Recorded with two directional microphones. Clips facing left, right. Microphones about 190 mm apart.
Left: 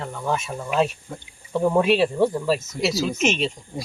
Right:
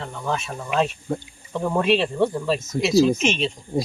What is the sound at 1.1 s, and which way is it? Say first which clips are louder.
Speech: right 10 dB; 45° right (ahead or behind).